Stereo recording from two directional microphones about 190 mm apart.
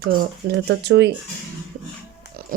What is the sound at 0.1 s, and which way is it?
Speech, 65° right (ahead or behind).